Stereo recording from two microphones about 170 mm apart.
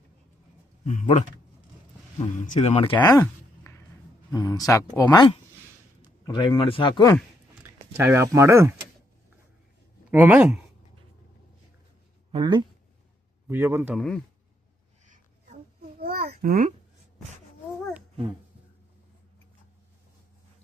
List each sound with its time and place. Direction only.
0.9 s speech: 45° left (ahead or behind)
2.4 s speech: 40° left (ahead or behind)
7.6 s speech: 10° right (ahead or behind)
10.1 s speech: 10° right (ahead or behind)
12.3 s speech: 25° right (ahead or behind)
13.5 s speech: 15° right (ahead or behind)
13.9 s speech: 5° left (ahead or behind)
16.0 s babbling: 65° right (ahead or behind)
16.3 s a child's voice: 55° right (ahead or behind)